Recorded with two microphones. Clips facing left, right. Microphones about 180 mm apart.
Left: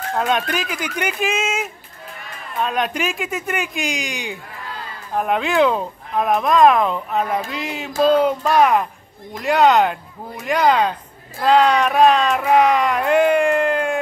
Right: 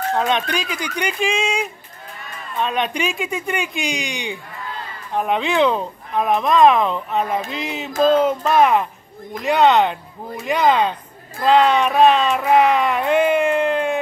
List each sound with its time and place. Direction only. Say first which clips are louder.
0.1 s speech: left 1 dB; 5° left (ahead or behind)